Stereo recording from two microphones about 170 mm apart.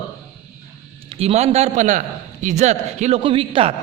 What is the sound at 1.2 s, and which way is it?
A man's voice, 40° right (ahead or behind).